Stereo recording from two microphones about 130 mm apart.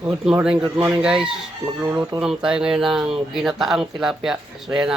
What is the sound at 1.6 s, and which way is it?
Speech, 20° right (ahead or behind).